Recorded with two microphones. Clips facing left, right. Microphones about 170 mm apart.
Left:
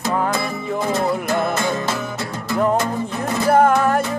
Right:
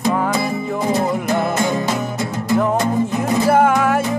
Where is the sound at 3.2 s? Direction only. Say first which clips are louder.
Even; 5° right (ahead or behind).